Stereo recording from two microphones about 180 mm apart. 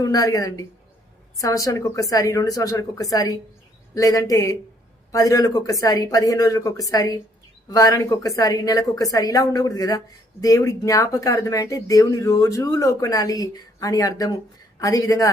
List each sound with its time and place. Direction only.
0.0 s speech: 20° left (ahead or behind)